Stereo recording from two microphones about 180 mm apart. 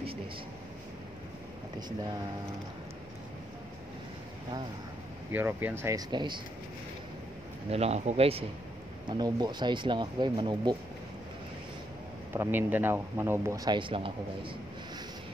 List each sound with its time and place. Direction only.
1.8 s speech: 25° right (ahead or behind)
5.3 s speech: 10° right (ahead or behind)
7.7 s speech: 35° right (ahead or behind)
9.1 s speech: 25° right (ahead or behind)
12.4 s speech: 10° right (ahead or behind); by 14.5 s 30° right (ahead or behind)